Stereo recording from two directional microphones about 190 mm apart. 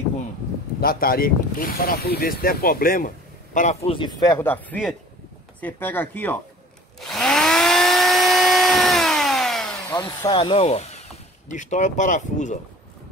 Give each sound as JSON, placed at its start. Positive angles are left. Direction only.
{"t": 0.7, "sound": "speech", "side_deg": 50}
{"t": 3.5, "sound": "a man's voice", "side_deg": 35}
{"t": 7.1, "sound": "tools", "side_deg": 0}
{"t": 9.8, "sound": "speech", "side_deg": 20}